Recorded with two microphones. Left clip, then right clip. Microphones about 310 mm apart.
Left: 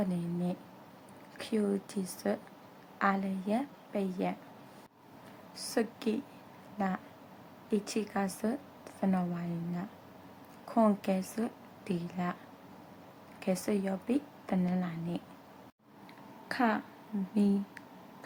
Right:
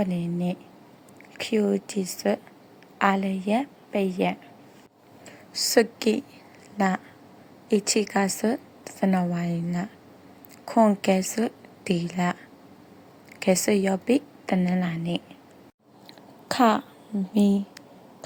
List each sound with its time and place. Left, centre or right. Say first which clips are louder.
0.0 s a woman's voice: right 7 dB; centre
5.5 s a woman's voice: right 13 dB; centre
13.4 s a woman's voice: right 11 dB; centre
16.5 s a woman's voice: right 10 dB; right